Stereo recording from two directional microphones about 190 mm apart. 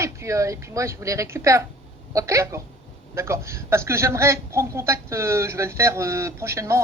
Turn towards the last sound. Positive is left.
turn(degrees=-15)  # may be behind; listen again after turning